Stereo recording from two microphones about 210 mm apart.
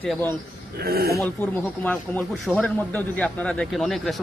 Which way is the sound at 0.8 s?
45° right (ahead or behind).